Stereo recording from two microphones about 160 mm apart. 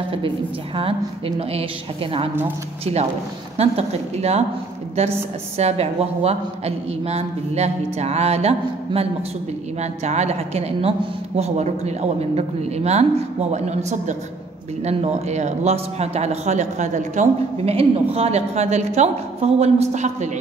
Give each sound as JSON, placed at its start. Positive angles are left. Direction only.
{"t": 0.7, "sound": "a woman's voice", "side_deg": -35}
{"t": 2.8, "sound": "a woman's voice", "side_deg": -40}
{"t": 5.6, "sound": "a woman's voice", "side_deg": -40}